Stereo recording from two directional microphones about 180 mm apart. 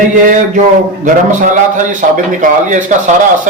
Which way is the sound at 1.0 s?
45° right (ahead or behind).